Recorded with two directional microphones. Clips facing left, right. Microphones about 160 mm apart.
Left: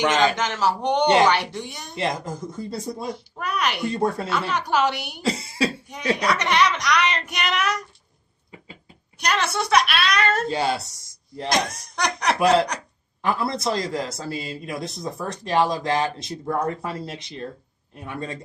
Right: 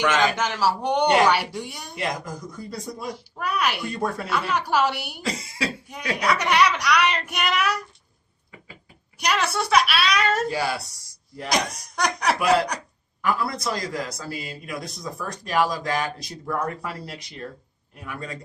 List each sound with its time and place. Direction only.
0.0 s a man's voice: 30° left (ahead or behind)
0.3 s a woman's voice: 5° right (ahead or behind)
1.0 s a man's voice: 25° left (ahead or behind)
1.3 s a woman's voice: 5° right (ahead or behind)
2.0 s a man's voice: 25° left (ahead or behind)
3.3 s a woman's voice: 5° right (ahead or behind)
3.8 s a man's voice: 25° left (ahead or behind)
4.3 s a woman's voice: centre (ahead or behind)
5.2 s cough: 30° left (ahead or behind)
6.2 s a woman's voice: 5° right (ahead or behind)
9.1 s a woman's voice: 5° right (ahead or behind)
10.5 s a man's voice: 25° left (ahead or behind)
11.7 s a woman's voice: centre (ahead or behind)
13.2 s a man's voice: 25° left (ahead or behind)